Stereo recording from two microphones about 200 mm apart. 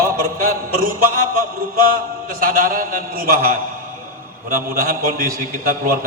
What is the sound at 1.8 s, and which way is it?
A man's voice, 45° right (ahead or behind).